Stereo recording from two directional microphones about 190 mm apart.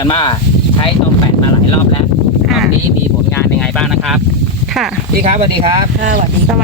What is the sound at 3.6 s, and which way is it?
Speech, 5° left (ahead or behind).